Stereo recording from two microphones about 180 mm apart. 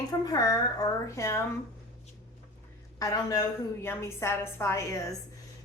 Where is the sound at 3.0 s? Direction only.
20° left (ahead or behind).